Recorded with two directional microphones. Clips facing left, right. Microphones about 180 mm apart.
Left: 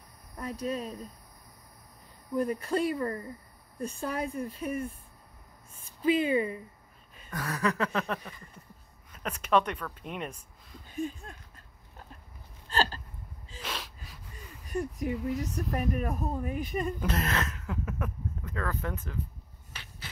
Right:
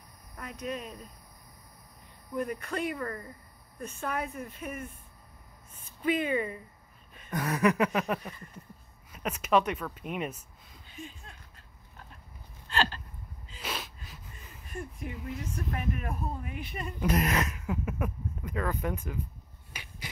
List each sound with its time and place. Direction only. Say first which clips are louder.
0.4 s a woman's voice: left 4 dB; 35° left (ahead or behind)
2.3 s a woman's voice: left 4 dB; 30° left (ahead or behind)
6.0 s speech: left 3 dB; 30° left (ahead or behind)
7.2 s speech: right 4 dB; 20° right (ahead or behind)
10.9 s a sound: left 11 dB; 45° left (ahead or behind)
13.6 s gasp: right 1 dB; 5° right (ahead or behind)
14.7 s a woman's voice: left 8 dB; 40° left (ahead or behind)
17.0 s speech: right 3 dB; 10° right (ahead or behind)
19.7 s dog: right 2 dB; 10° right (ahead or behind)